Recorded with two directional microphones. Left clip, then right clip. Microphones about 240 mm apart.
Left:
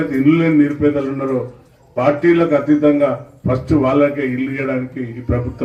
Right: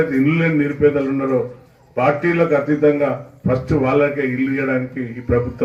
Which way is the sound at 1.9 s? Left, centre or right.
Left.